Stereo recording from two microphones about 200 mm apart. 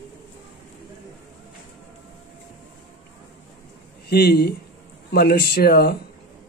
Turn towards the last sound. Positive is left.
turn(degrees=50)  # may be behind; listen again after turning